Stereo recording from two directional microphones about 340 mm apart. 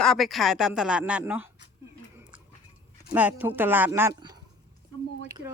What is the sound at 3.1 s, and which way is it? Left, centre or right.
Speech, centre.